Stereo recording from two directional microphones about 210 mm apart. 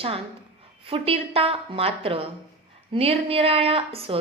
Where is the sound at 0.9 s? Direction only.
25° right (ahead or behind).